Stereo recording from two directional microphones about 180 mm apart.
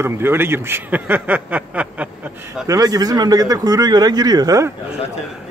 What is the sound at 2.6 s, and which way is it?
Speech, 20° right (ahead or behind).